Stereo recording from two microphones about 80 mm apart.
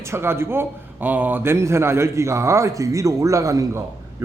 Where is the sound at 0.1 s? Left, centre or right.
Right.